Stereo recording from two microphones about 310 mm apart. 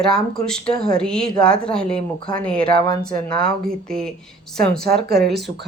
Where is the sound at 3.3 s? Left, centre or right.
Right.